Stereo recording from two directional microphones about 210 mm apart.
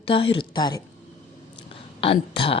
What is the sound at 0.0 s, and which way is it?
Speech, 25° left (ahead or behind).